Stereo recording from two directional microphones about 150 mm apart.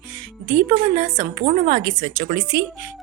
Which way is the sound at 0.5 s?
50° right (ahead or behind).